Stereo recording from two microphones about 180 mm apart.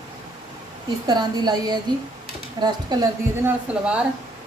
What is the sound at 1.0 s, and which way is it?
Speech, 25° right (ahead or behind).